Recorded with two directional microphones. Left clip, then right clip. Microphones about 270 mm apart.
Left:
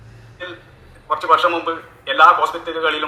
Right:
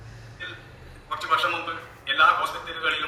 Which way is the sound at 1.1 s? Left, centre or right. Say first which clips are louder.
Left 9 dB; centre.